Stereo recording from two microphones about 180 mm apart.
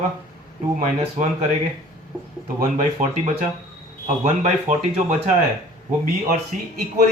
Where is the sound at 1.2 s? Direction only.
40° right (ahead or behind).